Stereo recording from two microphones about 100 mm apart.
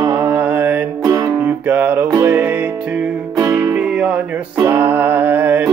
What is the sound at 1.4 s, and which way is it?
Music, 20° right (ahead or behind).